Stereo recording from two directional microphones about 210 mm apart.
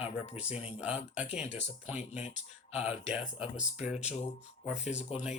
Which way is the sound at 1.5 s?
30° left (ahead or behind).